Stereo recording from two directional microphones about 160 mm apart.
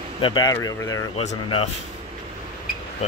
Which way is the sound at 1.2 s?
35° left (ahead or behind).